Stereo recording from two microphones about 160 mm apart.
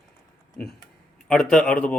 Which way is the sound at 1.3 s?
5° left (ahead or behind).